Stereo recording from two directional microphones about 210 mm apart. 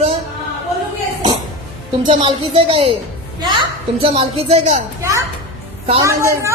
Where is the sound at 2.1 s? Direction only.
25° right (ahead or behind).